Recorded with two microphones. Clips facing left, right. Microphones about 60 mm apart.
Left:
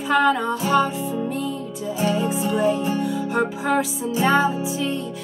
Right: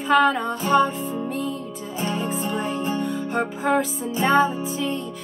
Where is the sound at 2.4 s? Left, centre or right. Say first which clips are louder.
Left 6 dB; centre.